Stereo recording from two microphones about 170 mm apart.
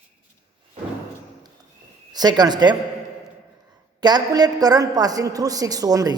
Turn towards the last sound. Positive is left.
turn(degrees=-20)  # may be behind; listen again after turning